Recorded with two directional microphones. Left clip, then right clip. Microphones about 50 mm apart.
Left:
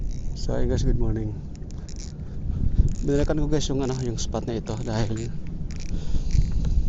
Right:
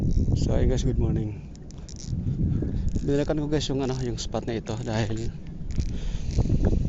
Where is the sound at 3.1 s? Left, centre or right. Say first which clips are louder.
Left 1 dB; right.